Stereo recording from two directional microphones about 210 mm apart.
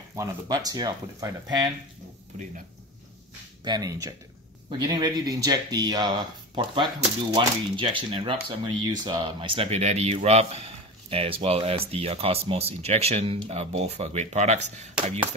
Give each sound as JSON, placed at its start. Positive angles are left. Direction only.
{"t": 0.1, "sound": "speech", "side_deg": -15}
{"t": 3.6, "sound": "speech", "side_deg": -20}